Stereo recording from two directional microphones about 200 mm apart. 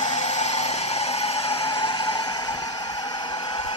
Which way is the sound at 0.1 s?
35° left (ahead or behind).